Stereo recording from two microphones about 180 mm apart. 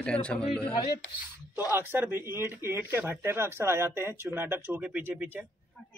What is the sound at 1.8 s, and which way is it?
A man's voice, 10° right (ahead or behind).